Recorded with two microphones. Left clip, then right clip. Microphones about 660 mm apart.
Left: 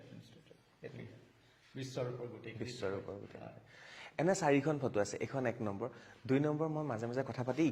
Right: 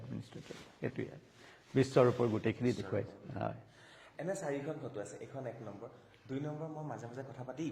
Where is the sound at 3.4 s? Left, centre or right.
Right.